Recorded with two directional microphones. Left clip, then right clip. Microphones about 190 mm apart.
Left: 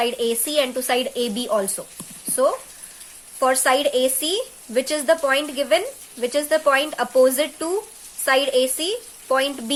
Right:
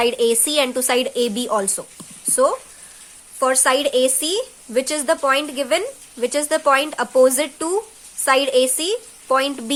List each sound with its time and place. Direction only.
0.0 s speech: 25° right (ahead or behind)